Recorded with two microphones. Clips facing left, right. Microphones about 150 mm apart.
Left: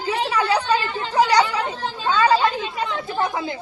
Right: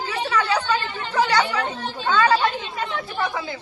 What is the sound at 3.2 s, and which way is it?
Speech, 20° left (ahead or behind).